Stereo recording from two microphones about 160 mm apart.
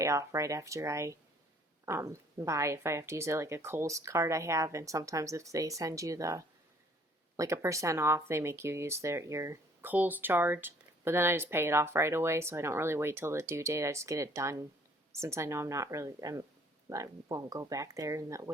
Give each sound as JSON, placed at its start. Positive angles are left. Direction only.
{"t": 0.0, "sound": "a woman's voice", "side_deg": -20}